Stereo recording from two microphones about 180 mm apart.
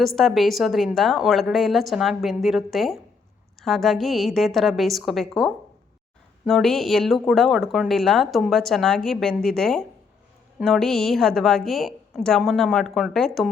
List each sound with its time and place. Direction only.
0.0 s speech: centre (ahead or behind)